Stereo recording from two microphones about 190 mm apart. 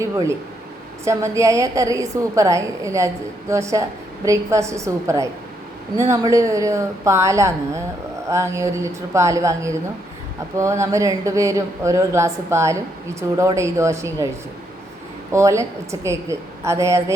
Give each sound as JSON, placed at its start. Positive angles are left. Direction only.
{"t": 0.0, "sound": "a woman's voice", "side_deg": -15}
{"t": 15.3, "sound": "a woman's voice", "side_deg": -15}